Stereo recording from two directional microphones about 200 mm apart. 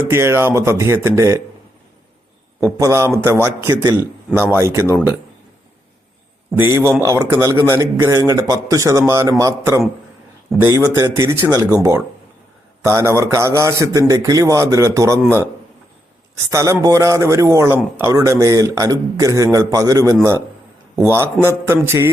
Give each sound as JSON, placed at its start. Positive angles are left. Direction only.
{"t": 0.1, "sound": "a man's voice", "side_deg": -15}
{"t": 2.6, "sound": "a man's voice", "side_deg": -15}
{"t": 6.6, "sound": "a man's voice", "side_deg": -15}
{"t": 16.5, "sound": "a man's voice", "side_deg": -15}